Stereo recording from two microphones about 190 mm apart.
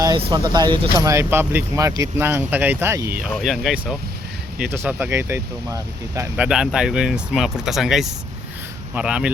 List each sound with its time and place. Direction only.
0.0 s speech: 20° right (ahead or behind)
3.3 s speech: centre (ahead or behind)